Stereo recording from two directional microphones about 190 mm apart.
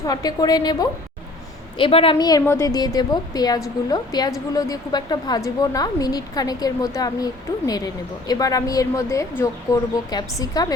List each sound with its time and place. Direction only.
0.0 s a woman's voice: 20° left (ahead or behind)
8.3 s a woman's voice: 20° left (ahead or behind)